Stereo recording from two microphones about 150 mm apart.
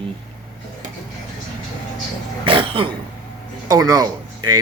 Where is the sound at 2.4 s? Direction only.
35° right (ahead or behind).